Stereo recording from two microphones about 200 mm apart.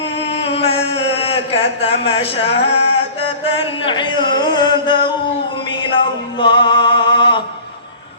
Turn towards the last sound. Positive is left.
turn(degrees=25)  # may be behind; listen again after turning